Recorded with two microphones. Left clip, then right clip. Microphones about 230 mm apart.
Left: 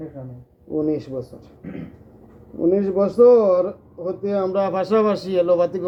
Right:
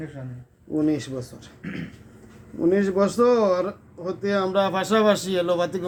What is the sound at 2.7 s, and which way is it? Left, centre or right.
Speech, right.